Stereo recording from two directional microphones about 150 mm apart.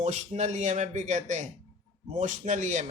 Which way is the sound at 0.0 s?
50° right (ahead or behind).